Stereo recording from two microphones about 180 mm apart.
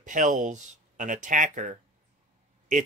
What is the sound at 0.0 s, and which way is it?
Speech, 45° right (ahead or behind).